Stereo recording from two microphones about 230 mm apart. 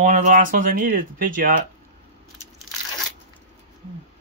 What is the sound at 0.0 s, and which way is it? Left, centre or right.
Speech, right.